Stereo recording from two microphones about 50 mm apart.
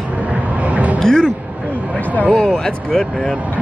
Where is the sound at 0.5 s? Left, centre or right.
Right.